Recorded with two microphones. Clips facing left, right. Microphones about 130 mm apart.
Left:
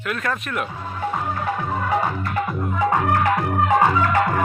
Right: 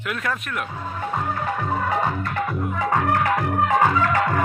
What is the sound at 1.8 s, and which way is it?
Music, 10° left (ahead or behind).